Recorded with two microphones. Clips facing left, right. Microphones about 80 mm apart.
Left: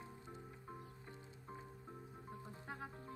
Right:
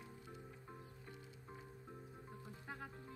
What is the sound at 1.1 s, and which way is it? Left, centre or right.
Music, left.